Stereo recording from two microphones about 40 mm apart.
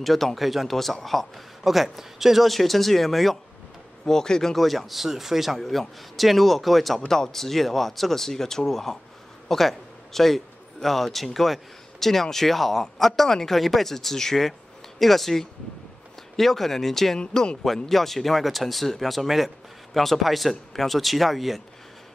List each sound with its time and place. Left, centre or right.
0.0 s speech: centre
4.0 s speech: centre
4.6 s speech: centre
5.6 s speech: centre
7.1 s a man's voice: centre
17.2 s speech: centre
17.8 s speech: centre